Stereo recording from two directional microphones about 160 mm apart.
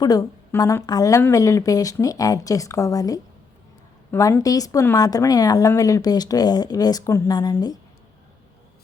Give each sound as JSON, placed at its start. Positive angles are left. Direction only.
{"t": 0.0, "sound": "speech", "side_deg": 25}